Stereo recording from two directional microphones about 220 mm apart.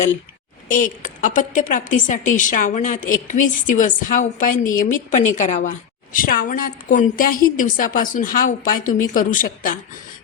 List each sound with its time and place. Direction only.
0.7 s a woman's voice: 35° left (ahead or behind)